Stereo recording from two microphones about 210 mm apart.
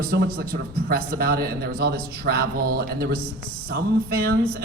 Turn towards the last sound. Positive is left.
turn(degrees=-45)  # may be behind; listen again after turning